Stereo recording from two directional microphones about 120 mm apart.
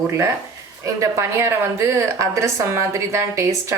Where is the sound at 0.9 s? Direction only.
25° right (ahead or behind).